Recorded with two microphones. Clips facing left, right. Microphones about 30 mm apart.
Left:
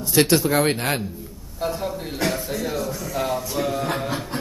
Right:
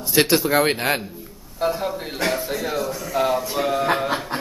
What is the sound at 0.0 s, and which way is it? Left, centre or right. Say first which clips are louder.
Speech: even; centre.